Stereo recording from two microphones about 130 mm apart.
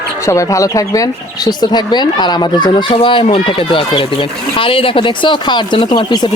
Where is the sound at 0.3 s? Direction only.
25° left (ahead or behind).